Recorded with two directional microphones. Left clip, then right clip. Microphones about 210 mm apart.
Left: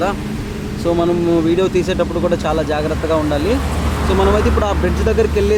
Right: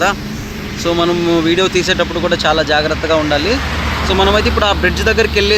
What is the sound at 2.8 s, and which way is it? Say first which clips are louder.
Speech: right 3 dB; 20° right (ahead or behind).